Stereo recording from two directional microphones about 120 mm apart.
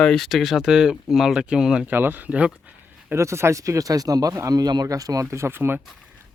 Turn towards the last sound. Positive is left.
turn(degrees=-20)  # may be behind; listen again after turning